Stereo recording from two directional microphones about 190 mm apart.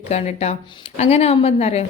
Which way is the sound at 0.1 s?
35° left (ahead or behind).